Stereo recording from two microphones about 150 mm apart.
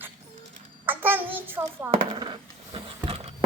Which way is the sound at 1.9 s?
35° right (ahead or behind).